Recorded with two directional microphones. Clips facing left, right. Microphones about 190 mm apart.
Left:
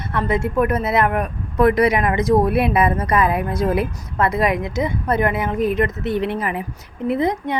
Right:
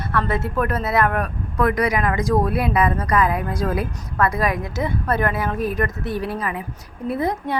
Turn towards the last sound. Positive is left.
turn(degrees=20)  # may be behind; listen again after turning